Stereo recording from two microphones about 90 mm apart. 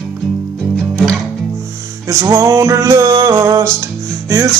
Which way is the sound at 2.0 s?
40° right (ahead or behind).